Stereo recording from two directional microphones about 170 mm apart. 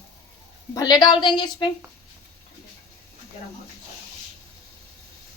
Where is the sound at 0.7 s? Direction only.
20° left (ahead or behind).